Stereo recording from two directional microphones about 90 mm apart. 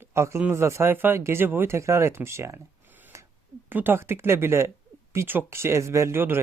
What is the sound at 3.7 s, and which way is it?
Speech, 20° right (ahead or behind).